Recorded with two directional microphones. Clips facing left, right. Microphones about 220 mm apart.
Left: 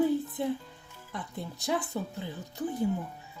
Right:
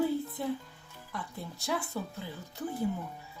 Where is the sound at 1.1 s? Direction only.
20° left (ahead or behind).